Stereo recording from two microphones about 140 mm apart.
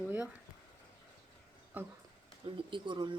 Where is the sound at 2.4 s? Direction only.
35° right (ahead or behind).